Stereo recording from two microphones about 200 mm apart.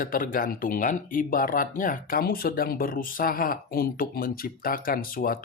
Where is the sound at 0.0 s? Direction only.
45° left (ahead or behind).